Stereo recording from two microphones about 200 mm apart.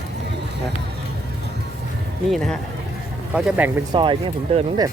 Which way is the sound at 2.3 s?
Centre (ahead or behind).